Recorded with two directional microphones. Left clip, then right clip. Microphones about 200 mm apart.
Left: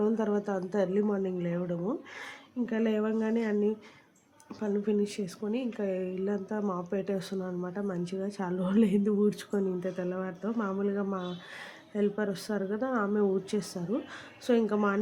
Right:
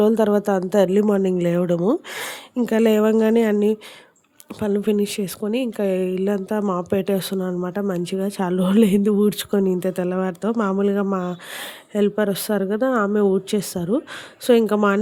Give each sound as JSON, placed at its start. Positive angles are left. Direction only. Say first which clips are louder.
{"t": 0.0, "sound": "a woman's voice", "louder": "right 12 dB", "side_deg": -55}